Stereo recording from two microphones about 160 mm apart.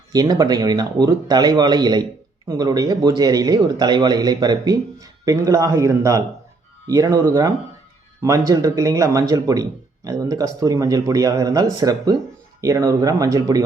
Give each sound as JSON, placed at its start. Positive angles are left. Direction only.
{"t": 0.1, "sound": "speech", "side_deg": -25}